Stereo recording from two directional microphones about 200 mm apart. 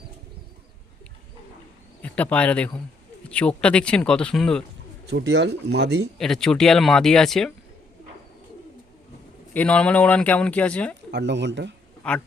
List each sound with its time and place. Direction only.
2.0 s speech: 5° left (ahead or behind)
5.0 s speech: 60° right (ahead or behind)
6.1 s speech: centre (ahead or behind)
9.5 s speech: 5° left (ahead or behind)
11.1 s speech: 60° right (ahead or behind)